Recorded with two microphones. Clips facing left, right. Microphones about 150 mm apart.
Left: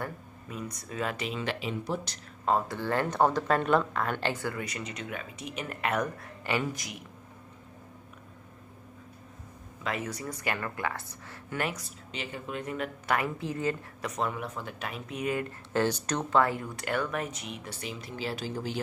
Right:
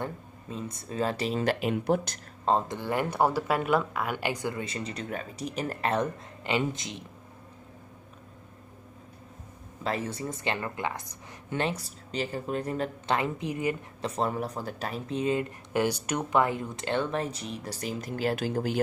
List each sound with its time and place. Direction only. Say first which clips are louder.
0.0 s speech: right 2 dB; 25° right (ahead or behind); by 2.1 s 55° right (ahead or behind)
2.4 s speech: right 1 dB; 25° right (ahead or behind)
2.8 s speech: even; 15° right (ahead or behind)
9.8 s speech: right 3 dB; 30° right (ahead or behind)
14.0 s speech: right 3 dB; 35° right (ahead or behind); by 18.8 s 55° right (ahead or behind)